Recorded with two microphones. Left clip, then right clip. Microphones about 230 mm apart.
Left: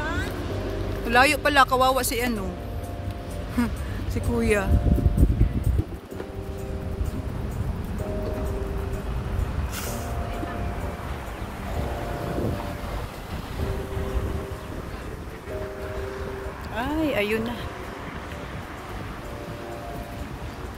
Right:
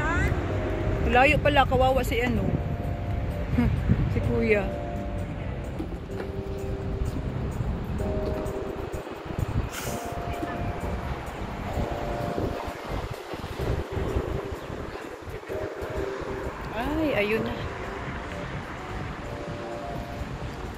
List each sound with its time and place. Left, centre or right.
0.0 s vehicle: left
1.1 s speech: centre
4.4 s speech: centre
16.7 s a sound: centre